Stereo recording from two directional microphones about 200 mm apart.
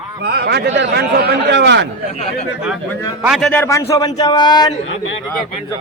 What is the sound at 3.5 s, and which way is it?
Speech, 10° left (ahead or behind).